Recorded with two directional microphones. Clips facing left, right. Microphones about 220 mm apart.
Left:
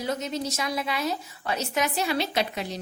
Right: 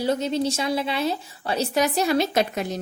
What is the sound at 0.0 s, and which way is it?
A woman's voice, 30° right (ahead or behind).